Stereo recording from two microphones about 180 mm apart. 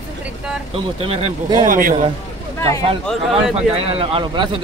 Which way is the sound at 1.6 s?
50° right (ahead or behind).